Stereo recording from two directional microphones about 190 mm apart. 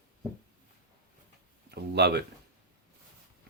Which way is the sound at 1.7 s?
60° right (ahead or behind).